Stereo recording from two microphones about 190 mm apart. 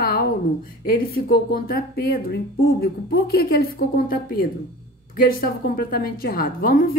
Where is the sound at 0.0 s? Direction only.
50° left (ahead or behind).